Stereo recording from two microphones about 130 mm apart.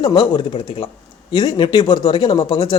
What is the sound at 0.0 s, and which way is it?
Speech, 30° left (ahead or behind).